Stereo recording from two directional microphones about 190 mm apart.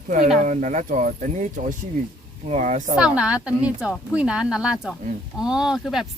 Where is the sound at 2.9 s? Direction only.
5° right (ahead or behind).